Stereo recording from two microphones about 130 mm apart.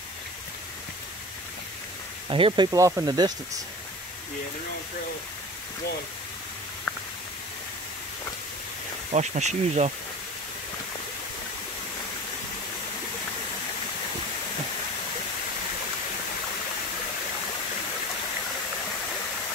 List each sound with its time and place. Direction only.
2.2 s speech: 40° right (ahead or behind)
9.1 s speech: 60° right (ahead or behind)